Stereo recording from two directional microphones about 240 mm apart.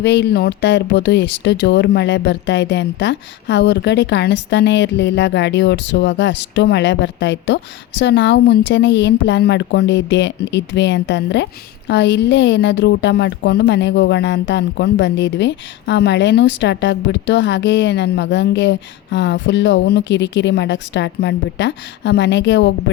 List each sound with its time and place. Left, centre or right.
0.0 s speech: left